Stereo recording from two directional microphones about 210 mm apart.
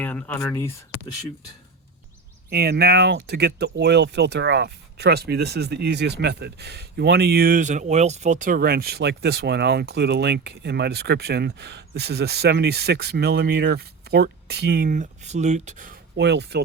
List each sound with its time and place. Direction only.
0.0 s speech: 5° left (ahead or behind)
2.5 s speech: 50° right (ahead or behind)
16.1 s speech: 55° right (ahead or behind)